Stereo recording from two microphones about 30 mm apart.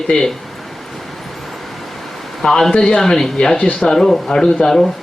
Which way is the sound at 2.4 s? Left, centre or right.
Centre.